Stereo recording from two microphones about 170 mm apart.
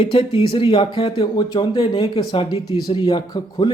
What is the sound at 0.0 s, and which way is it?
Speech, 30° left (ahead or behind).